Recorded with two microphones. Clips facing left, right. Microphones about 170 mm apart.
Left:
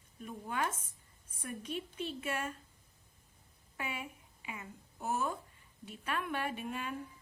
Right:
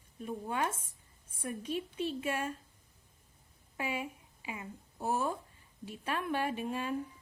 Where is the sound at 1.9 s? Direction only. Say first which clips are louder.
Right 4 dB; 30° right (ahead or behind).